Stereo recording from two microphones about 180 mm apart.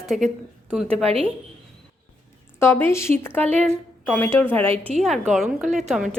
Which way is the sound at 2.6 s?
15° left (ahead or behind).